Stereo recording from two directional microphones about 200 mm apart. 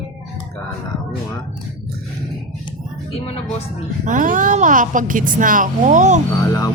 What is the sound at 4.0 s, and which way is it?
A woman's voice, 40° right (ahead or behind).